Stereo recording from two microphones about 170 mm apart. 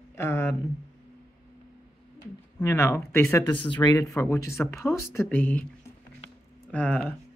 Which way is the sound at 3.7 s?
25° left (ahead or behind).